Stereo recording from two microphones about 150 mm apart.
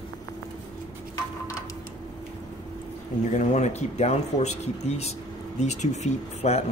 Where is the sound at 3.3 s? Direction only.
50° left (ahead or behind).